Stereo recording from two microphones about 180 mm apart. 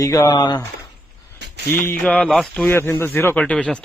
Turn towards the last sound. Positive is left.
turn(degrees=5)  # may be behind; listen again after turning